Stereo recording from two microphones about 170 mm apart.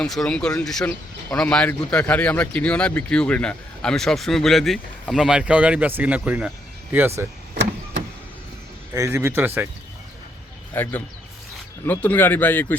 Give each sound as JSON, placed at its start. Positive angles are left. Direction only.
{"t": 0.0, "sound": "a man's voice", "side_deg": 5}
{"t": 8.9, "sound": "a man's voice", "side_deg": -15}
{"t": 10.8, "sound": "speech", "side_deg": 10}